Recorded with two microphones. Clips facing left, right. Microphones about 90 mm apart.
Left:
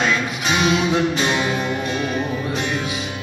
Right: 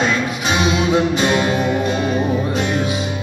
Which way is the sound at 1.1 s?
45° right (ahead or behind).